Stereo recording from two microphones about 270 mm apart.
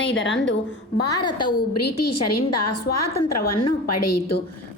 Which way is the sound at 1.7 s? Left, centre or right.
Left.